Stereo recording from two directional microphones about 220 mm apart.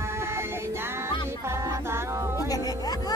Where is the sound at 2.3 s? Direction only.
15° left (ahead or behind).